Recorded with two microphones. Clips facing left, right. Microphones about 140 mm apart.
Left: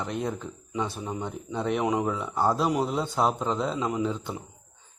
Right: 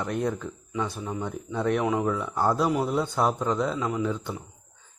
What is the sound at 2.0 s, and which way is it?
Speech, centre (ahead or behind).